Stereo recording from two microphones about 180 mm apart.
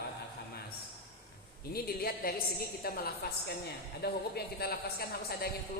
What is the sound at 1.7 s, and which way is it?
A woman's voice, 60° left (ahead or behind).